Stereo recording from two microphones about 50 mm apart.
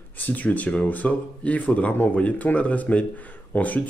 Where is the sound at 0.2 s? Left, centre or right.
Left.